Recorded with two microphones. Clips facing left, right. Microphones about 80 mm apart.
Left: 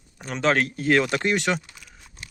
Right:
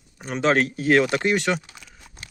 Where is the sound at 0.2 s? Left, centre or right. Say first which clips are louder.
Right 2 dB; centre.